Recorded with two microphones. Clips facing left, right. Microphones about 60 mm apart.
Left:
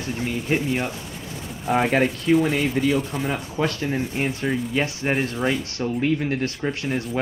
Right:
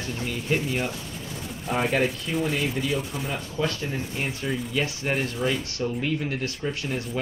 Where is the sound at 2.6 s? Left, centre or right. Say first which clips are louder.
Left 5 dB; left.